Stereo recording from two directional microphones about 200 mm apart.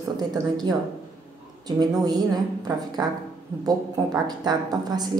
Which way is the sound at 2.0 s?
20° right (ahead or behind).